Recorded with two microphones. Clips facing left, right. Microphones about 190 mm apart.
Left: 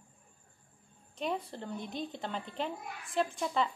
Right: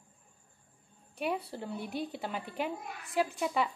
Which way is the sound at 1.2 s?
10° right (ahead or behind).